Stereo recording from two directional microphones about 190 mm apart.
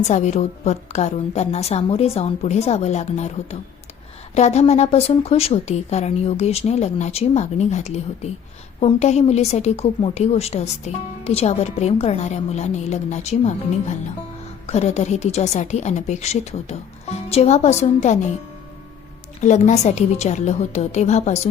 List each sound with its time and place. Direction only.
0.1 s a woman's voice: 35° left (ahead or behind)
19.4 s a woman's voice: 40° left (ahead or behind)